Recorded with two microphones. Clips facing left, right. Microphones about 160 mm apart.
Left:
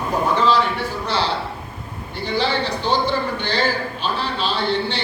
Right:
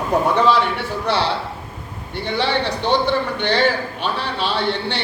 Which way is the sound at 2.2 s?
65° right (ahead or behind).